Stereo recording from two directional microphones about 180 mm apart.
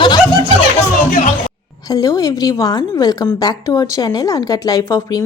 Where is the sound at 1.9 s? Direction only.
20° left (ahead or behind).